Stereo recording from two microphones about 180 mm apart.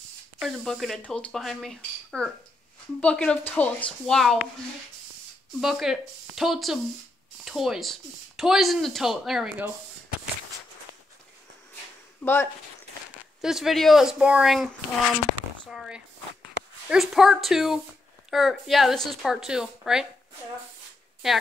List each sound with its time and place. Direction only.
0.4 s speech: centre (ahead or behind)
5.6 s speech: centre (ahead or behind)
12.2 s speech: 10° left (ahead or behind)
13.4 s speech: centre (ahead or behind)
15.7 s speech: centre (ahead or behind)
21.2 s speech: centre (ahead or behind)